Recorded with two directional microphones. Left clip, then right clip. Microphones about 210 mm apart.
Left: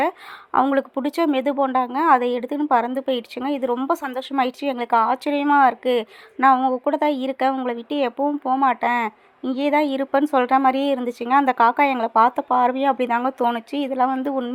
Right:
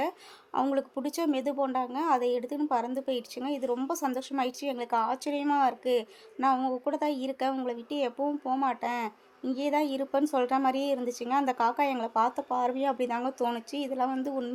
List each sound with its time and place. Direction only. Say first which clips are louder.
0.5 s speech: left 10 dB; 20° left (ahead or behind)